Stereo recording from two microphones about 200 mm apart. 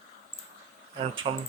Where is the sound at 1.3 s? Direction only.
30° right (ahead or behind).